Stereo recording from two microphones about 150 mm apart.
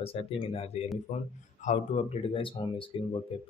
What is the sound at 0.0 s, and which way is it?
Speech, 40° left (ahead or behind).